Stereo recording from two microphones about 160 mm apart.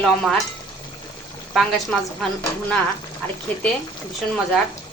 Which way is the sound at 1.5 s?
Centre (ahead or behind).